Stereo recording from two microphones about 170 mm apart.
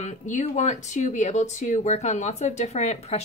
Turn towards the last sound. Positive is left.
turn(degrees=40)  # may be behind; listen again after turning